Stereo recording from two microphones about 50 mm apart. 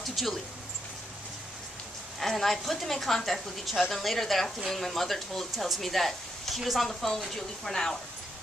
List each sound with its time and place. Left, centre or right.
0.0 s speech: centre
2.1 s speech: centre